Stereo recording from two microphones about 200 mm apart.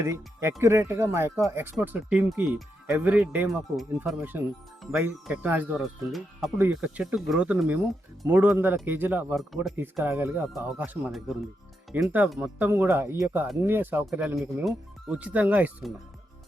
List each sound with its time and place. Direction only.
0.0 s speech: 15° right (ahead or behind)
10.0 s speech: 10° right (ahead or behind)